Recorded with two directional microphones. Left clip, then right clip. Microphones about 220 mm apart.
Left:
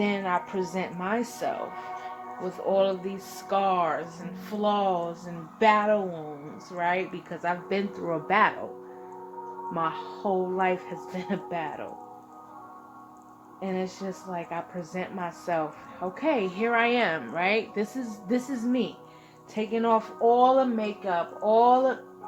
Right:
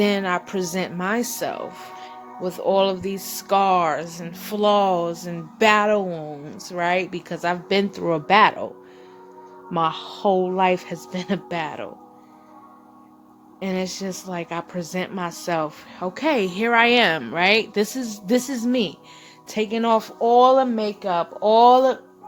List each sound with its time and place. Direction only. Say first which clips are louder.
0.0 s speech: right 6 dB; 50° right (ahead or behind)
9.7 s speech: right 8 dB; 45° right (ahead or behind)
13.6 s speech: right 5 dB; 50° right (ahead or behind)